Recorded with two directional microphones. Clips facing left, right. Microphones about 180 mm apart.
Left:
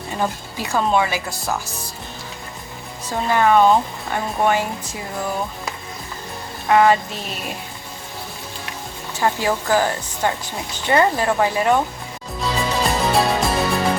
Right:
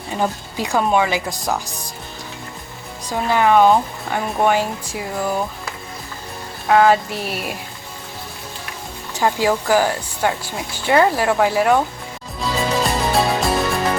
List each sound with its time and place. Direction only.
0.2 s speech: 15° right (ahead or behind)
3.1 s speech: 15° right (ahead or behind)
6.7 s speech: 10° right (ahead or behind)
9.1 s speech: 15° right (ahead or behind)
12.4 s music: centre (ahead or behind)